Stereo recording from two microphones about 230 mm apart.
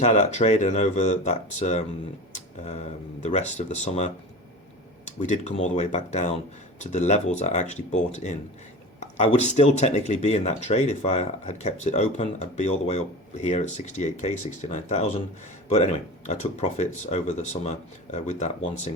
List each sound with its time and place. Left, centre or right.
0.0 s speech: left